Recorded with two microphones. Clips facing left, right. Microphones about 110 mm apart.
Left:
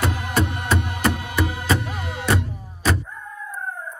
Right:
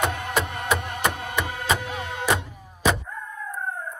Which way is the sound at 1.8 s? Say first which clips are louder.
Left 1 dB; 70° left (ahead or behind).